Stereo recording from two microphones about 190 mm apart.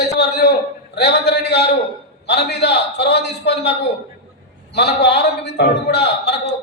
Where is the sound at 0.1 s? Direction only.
55° left (ahead or behind).